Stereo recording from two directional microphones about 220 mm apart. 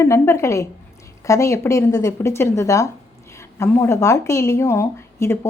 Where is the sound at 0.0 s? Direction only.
10° left (ahead or behind).